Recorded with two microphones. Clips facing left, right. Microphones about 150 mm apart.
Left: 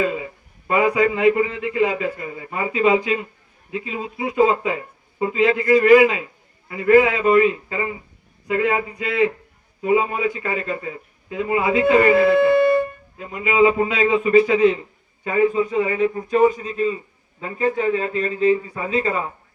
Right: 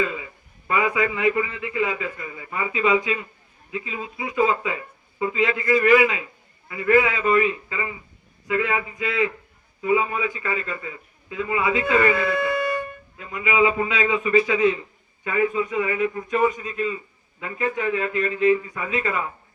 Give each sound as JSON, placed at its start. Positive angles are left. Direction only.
{"t": 0.0, "sound": "a man's voice", "side_deg": 45}